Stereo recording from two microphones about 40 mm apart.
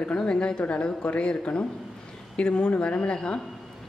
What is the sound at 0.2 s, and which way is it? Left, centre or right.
Speech, left.